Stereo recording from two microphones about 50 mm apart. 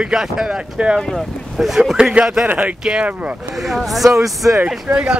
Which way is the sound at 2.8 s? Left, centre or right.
Centre.